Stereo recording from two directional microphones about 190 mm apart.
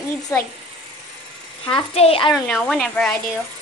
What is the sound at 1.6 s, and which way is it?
Speech, 30° left (ahead or behind).